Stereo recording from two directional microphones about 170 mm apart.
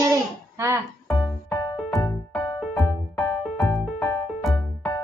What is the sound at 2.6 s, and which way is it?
Music, 5° left (ahead or behind).